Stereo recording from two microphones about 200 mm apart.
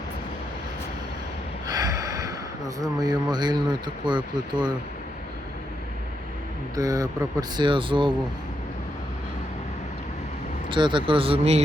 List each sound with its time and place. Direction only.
1.6 s gasp: 20° right (ahead or behind)
2.8 s speech: 20° right (ahead or behind)
6.7 s speech: 15° right (ahead or behind)
10.7 s speech: 25° right (ahead or behind)